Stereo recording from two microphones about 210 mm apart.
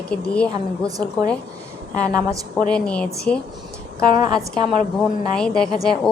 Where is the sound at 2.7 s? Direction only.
5° left (ahead or behind).